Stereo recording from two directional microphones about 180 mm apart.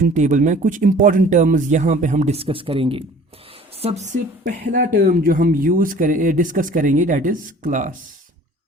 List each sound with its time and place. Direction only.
0.0 s speech: 45° right (ahead or behind)